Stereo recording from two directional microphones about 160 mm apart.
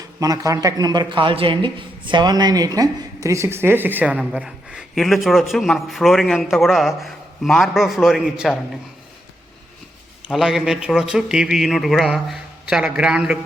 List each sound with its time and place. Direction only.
0.0 s a man's voice: 20° right (ahead or behind); by 8.5 s 5° right (ahead or behind)
10.2 s a man's voice: centre (ahead or behind)